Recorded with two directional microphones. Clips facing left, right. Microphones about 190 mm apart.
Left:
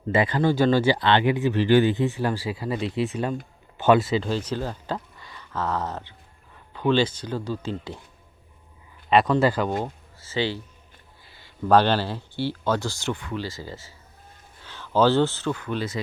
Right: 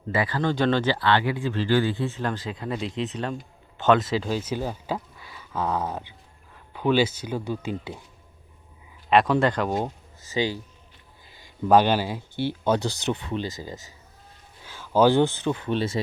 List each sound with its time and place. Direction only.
0.1 s speech: 20° left (ahead or behind)
0.4 s a man's voice: 5° left (ahead or behind)
4.1 s speech: 5° right (ahead or behind)
9.0 s speech: centre (ahead or behind)
9.6 s speech: 15° right (ahead or behind)